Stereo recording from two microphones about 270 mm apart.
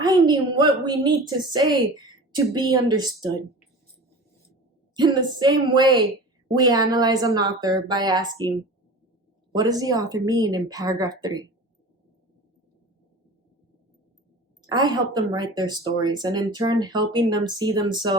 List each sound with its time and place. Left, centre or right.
0.0 s a woman's voice: centre
4.9 s speech: centre
9.6 s speech: centre
14.7 s speech: centre